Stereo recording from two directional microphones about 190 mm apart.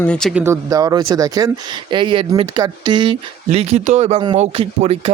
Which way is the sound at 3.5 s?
35° right (ahead or behind).